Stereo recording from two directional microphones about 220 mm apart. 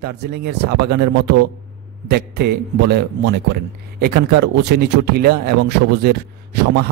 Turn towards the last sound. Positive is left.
turn(degrees=-50)  # may be behind; listen again after turning